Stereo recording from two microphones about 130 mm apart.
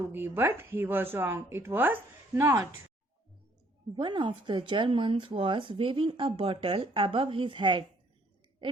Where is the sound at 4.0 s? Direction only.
35° right (ahead or behind).